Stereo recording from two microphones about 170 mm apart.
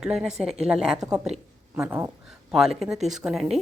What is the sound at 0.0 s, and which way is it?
Speech, 5° right (ahead or behind).